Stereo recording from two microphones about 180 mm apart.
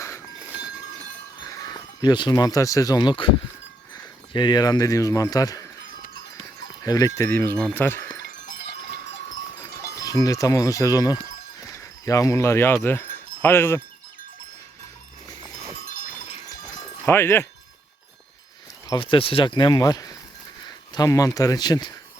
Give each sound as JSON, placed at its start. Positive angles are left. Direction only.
{"t": 1.5, "sound": "speech", "side_deg": 20}
{"t": 6.8, "sound": "speech", "side_deg": 20}
{"t": 10.0, "sound": "speech", "side_deg": 20}
{"t": 12.0, "sound": "wind chime", "side_deg": 20}
{"t": 17.1, "sound": "speech", "side_deg": 10}
{"t": 18.9, "sound": "speech", "side_deg": 30}